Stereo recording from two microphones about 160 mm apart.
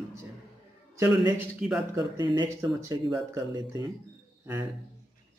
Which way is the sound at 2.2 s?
25° right (ahead or behind).